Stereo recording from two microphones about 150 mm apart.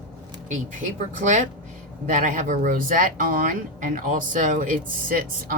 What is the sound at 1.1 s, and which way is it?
A woman's voice, 55° right (ahead or behind).